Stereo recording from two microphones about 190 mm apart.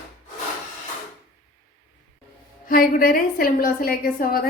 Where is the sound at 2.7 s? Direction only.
50° left (ahead or behind).